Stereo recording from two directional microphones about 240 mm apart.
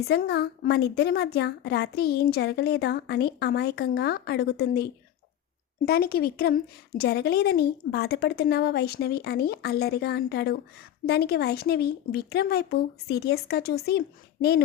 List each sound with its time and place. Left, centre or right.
0.0 s a woman's voice: left